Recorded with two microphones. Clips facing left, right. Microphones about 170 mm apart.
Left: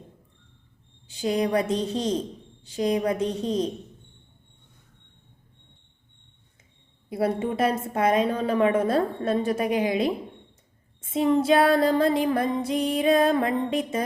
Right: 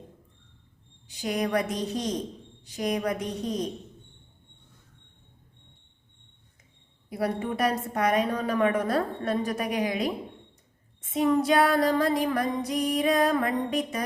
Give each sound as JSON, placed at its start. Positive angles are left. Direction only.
{"t": 1.0, "sound": "a woman's voice", "side_deg": 25}
{"t": 7.1, "sound": "a woman's voice", "side_deg": 25}